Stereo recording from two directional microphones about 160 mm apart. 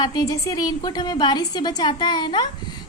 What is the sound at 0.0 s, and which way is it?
A woman's voice, 25° left (ahead or behind).